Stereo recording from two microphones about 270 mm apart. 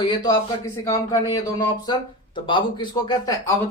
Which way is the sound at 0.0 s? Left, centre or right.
Centre.